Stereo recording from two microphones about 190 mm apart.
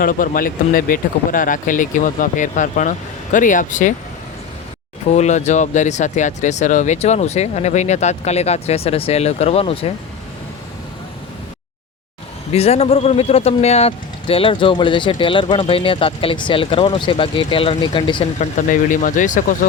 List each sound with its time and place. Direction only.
0.0 s speech: 45° left (ahead or behind)
5.1 s speech: 35° left (ahead or behind)
12.5 s speech: 30° left (ahead or behind)
18.3 s speech: 45° left (ahead or behind)